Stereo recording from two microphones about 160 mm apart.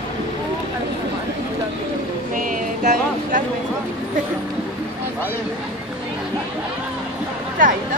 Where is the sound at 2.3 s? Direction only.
55° right (ahead or behind).